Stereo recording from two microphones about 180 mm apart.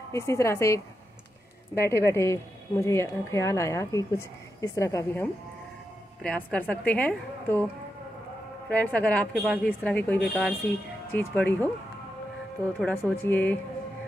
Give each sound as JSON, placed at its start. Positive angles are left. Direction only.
{"t": 0.1, "sound": "speech", "side_deg": 15}
{"t": 1.8, "sound": "speech", "side_deg": 15}
{"t": 8.6, "sound": "speech", "side_deg": 5}
{"t": 12.8, "sound": "speech", "side_deg": 10}